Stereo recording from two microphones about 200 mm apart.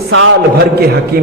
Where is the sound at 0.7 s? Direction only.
50° right (ahead or behind).